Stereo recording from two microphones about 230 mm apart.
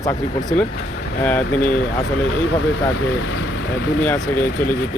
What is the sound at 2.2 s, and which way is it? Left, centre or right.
Speech, left.